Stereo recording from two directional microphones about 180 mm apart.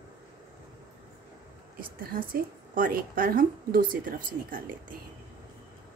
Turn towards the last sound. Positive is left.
turn(degrees=-50)  # may be behind; listen again after turning